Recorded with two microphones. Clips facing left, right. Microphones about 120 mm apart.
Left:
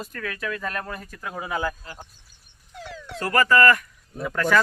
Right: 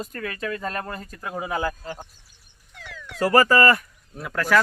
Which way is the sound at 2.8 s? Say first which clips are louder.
Left 4 dB; 30° left (ahead or behind).